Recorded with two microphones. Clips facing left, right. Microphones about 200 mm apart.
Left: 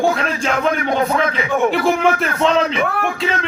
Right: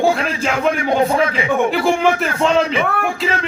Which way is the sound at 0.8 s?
30° right (ahead or behind).